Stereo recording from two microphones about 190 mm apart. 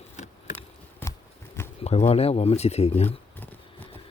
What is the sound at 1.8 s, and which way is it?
Speech, 35° left (ahead or behind).